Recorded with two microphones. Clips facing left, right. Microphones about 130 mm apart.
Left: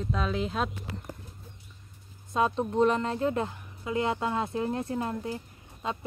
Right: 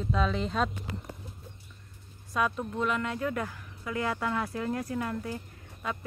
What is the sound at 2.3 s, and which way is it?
Speech, 25° left (ahead or behind).